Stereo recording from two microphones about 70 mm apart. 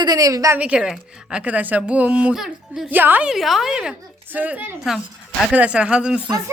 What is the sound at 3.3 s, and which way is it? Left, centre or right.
Speech, centre.